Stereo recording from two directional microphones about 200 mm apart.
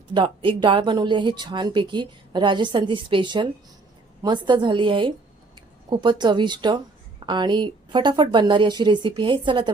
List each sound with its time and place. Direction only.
0.1 s speech: 25° right (ahead or behind)